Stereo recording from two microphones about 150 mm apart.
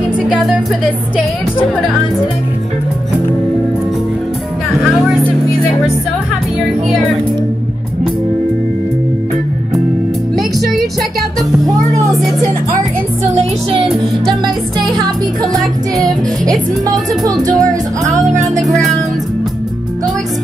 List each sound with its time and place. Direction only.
0.3 s music: 5° right (ahead or behind)
10.6 s music: centre (ahead or behind)
14.4 s music: 30° right (ahead or behind)
16.0 s music: 25° right (ahead or behind)
18.3 s music: 55° right (ahead or behind)
18.6 s music: centre (ahead or behind)